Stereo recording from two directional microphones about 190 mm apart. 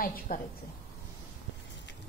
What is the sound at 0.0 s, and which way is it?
Speech, 50° left (ahead or behind).